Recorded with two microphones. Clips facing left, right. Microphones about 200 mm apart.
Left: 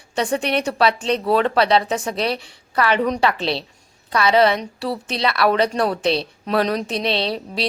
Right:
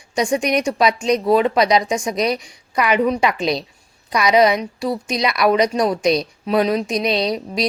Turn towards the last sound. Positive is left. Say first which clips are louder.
# right 3 dB
turn(degrees=30)  # may be behind; listen again after turning